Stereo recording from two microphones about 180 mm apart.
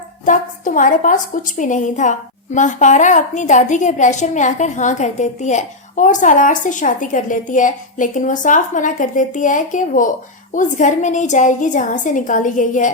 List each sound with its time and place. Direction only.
0.3 s a woman's voice: 45° left (ahead or behind)